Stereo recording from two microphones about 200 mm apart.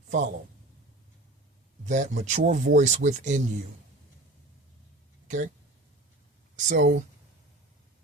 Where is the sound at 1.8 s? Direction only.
35° right (ahead or behind).